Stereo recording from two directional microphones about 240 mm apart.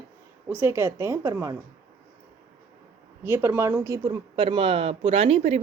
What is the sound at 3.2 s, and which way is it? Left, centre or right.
Speech, centre.